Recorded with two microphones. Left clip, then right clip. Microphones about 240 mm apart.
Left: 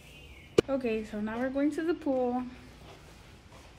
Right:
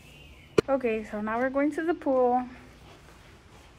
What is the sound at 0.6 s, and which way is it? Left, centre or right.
A woman's voice, right.